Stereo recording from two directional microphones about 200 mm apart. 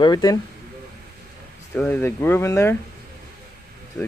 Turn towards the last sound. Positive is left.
turn(degrees=5)  # may be behind; listen again after turning